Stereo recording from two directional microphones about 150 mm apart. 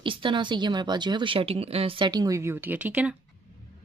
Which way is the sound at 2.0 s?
25° right (ahead or behind).